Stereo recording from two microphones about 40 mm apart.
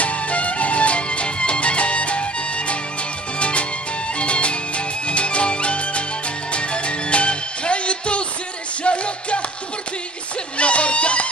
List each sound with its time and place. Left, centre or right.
0.0 s music: left
10.6 s music: left